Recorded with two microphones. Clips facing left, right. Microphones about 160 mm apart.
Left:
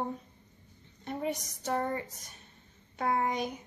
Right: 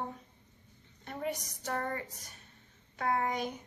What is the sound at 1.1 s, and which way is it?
Speech, 20° left (ahead or behind).